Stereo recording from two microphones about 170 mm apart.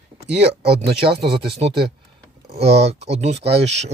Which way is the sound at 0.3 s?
75° right (ahead or behind).